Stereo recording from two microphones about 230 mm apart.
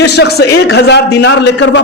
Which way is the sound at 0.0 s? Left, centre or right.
Left.